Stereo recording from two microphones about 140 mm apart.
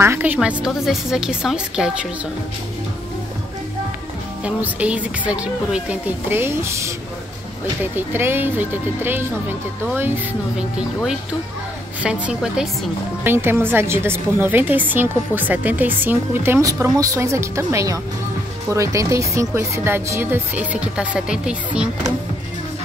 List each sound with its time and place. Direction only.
0.0 s a woman's voice: 15° right (ahead or behind)
4.6 s a woman's voice: 10° right (ahead or behind)
12.0 s a woman's voice: 5° right (ahead or behind)